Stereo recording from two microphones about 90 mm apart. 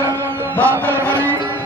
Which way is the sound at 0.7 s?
25° right (ahead or behind).